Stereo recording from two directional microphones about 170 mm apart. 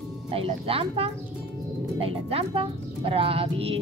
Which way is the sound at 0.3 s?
35° right (ahead or behind).